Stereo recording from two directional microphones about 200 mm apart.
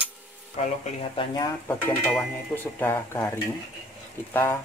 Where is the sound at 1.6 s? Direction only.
10° left (ahead or behind).